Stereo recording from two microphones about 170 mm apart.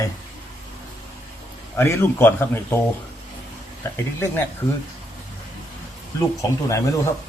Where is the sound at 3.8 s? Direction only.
15° left (ahead or behind).